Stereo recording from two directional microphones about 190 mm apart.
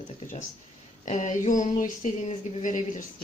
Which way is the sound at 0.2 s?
40° left (ahead or behind).